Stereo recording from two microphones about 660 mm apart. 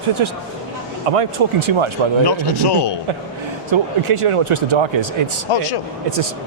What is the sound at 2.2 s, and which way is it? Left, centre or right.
Speech, left.